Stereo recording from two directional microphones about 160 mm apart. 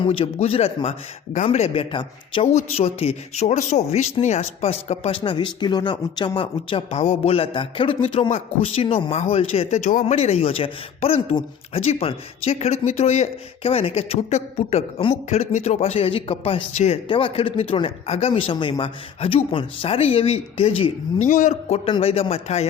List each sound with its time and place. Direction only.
0.0 s speech: 35° left (ahead or behind)
21.2 s a man's voice: 55° left (ahead or behind)